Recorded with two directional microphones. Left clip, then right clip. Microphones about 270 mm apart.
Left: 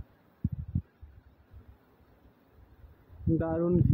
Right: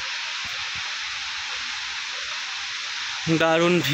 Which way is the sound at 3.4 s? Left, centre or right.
Right.